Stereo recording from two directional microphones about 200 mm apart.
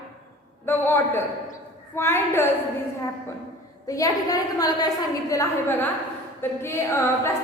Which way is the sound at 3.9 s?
15° left (ahead or behind).